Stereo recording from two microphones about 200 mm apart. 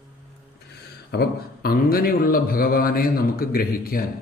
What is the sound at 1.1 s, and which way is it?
A man's voice, 55° left (ahead or behind).